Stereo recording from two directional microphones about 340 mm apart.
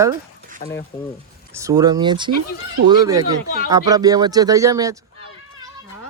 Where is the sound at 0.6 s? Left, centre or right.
Centre.